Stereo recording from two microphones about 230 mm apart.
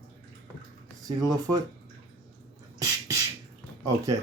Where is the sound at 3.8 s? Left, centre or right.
Centre.